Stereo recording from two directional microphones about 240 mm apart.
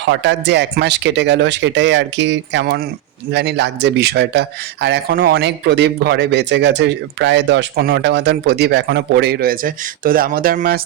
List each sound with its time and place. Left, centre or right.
0.1 s a man's voice: right